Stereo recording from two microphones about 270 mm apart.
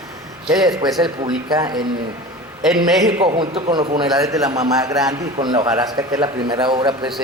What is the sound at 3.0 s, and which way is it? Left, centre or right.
A man's voice, centre.